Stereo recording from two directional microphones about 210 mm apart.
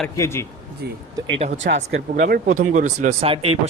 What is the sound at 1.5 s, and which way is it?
Speech, 60° right (ahead or behind).